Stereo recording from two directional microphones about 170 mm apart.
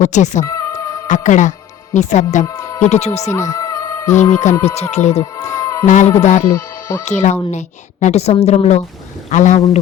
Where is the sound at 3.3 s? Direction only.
20° left (ahead or behind).